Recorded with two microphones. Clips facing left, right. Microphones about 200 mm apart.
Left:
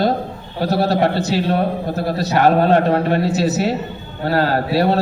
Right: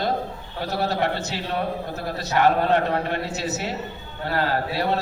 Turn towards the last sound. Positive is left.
turn(degrees=35)  # may be behind; listen again after turning